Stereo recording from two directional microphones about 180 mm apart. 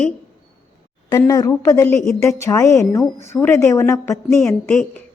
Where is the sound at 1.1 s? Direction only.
20° left (ahead or behind).